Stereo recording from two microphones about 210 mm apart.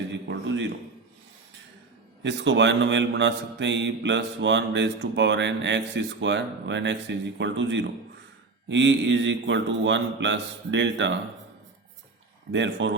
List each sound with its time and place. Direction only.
0.1 s a sound: 60° right (ahead or behind)
2.2 s mantra: 60° right (ahead or behind)
12.5 s mantra: 60° right (ahead or behind)